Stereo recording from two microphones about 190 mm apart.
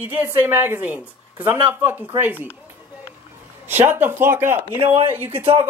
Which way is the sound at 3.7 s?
10° right (ahead or behind).